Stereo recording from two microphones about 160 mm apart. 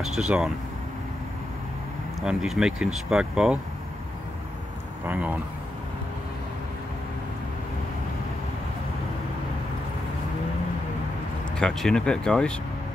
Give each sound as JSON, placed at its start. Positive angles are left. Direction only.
{"t": 0.0, "sound": "speech", "side_deg": 0}
{"t": 2.2, "sound": "speech", "side_deg": -5}
{"t": 5.0, "sound": "speech", "side_deg": -10}
{"t": 11.5, "sound": "speech", "side_deg": 5}